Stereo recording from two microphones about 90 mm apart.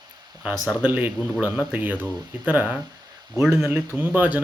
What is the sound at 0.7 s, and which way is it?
Speech, 20° right (ahead or behind).